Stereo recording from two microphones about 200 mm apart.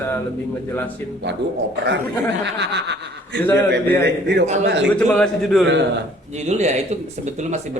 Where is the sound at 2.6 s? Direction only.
60° right (ahead or behind).